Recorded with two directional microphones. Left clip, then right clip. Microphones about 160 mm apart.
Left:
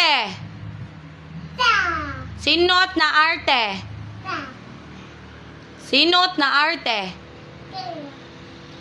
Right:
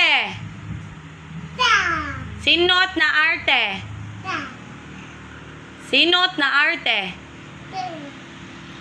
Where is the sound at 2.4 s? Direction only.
45° left (ahead or behind).